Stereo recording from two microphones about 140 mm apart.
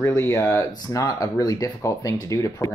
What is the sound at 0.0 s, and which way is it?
Speech, 20° left (ahead or behind).